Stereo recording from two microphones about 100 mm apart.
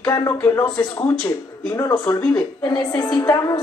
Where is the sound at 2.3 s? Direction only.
45° left (ahead or behind).